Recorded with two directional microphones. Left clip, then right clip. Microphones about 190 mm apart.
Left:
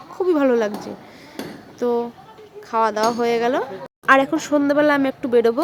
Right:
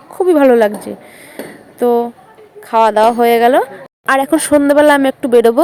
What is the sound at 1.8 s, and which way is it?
A woman's voice, 20° right (ahead or behind).